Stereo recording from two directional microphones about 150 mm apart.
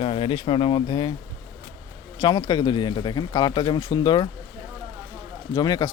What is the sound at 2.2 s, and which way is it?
Speech, 25° left (ahead or behind).